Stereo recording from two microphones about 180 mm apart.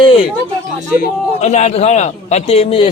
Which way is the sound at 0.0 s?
30° left (ahead or behind).